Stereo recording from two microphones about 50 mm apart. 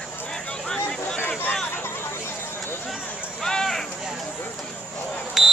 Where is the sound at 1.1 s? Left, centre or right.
Left.